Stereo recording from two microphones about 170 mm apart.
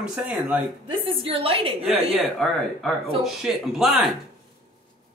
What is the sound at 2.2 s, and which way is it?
Speech, centre (ahead or behind).